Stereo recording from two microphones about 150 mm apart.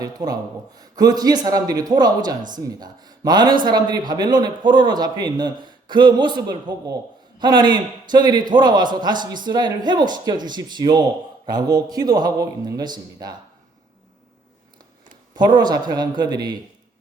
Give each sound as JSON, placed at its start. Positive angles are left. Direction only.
{"t": 0.0, "sound": "a man's voice", "side_deg": -25}
{"t": 15.4, "sound": "a man's voice", "side_deg": -30}